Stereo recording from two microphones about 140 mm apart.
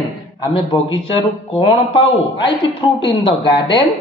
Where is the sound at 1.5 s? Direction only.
40° left (ahead or behind).